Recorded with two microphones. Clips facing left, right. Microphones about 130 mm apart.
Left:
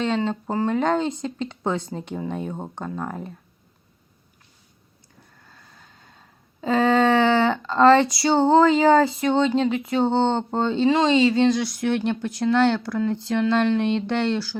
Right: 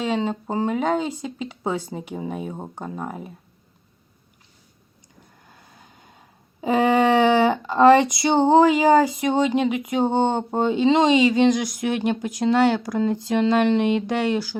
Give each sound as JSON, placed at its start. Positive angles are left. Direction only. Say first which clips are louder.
{"t": 0.0, "sound": "speech", "louder": "even", "side_deg": -10}
{"t": 5.4, "sound": "vehicle", "louder": "right 1 dB", "side_deg": -15}
{"t": 6.6, "sound": "speech", "louder": "right 1 dB", "side_deg": -15}